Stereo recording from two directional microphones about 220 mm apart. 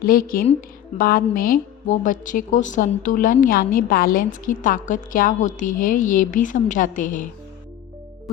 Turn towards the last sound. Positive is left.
turn(degrees=35)  # may be behind; listen again after turning